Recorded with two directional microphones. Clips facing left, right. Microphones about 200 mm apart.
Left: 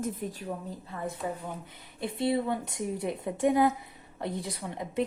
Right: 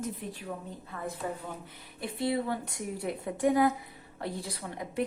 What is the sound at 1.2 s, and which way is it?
A woman's voice, 15° left (ahead or behind).